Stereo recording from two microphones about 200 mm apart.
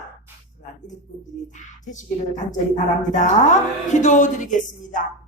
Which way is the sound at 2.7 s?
35° left (ahead or behind).